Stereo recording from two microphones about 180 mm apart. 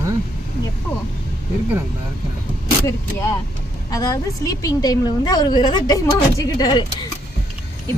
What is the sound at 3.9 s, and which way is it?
A woman's voice, 20° left (ahead or behind).